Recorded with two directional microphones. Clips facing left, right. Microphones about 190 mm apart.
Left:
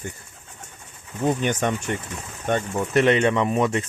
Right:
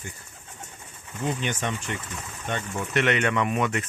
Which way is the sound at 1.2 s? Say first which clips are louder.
Left 6 dB; 50° left (ahead or behind).